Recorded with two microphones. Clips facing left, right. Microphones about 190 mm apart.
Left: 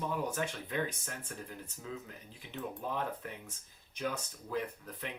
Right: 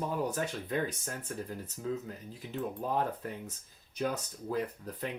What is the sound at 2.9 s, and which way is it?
Speech, 40° right (ahead or behind).